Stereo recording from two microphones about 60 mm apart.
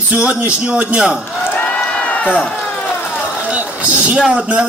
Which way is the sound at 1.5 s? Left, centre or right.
Left.